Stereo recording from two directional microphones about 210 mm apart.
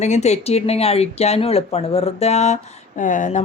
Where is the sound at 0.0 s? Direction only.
30° left (ahead or behind).